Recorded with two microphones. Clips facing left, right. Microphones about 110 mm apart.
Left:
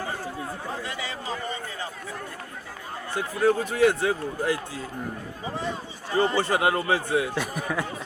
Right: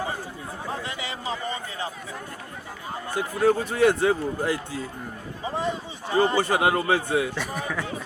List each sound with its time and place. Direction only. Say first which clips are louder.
3.4 s a man's voice: right 1 dB; 30° right (ahead or behind)
6.1 s a man's voice: right 2 dB; 15° right (ahead or behind)
7.3 s speech: left 1 dB; 10° left (ahead or behind)